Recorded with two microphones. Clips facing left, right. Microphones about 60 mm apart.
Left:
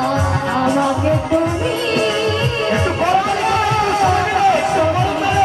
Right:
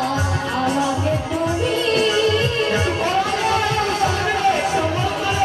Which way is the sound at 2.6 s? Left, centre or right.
Left.